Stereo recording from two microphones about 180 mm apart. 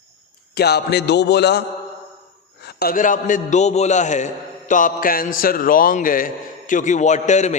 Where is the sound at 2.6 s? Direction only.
60° left (ahead or behind).